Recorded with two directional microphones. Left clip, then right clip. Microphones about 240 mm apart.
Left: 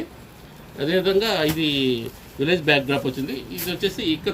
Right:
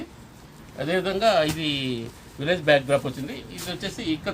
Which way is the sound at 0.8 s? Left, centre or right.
Right.